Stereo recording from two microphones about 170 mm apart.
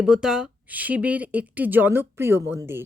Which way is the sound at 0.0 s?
5° right (ahead or behind).